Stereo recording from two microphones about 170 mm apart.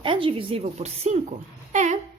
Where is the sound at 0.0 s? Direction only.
30° right (ahead or behind).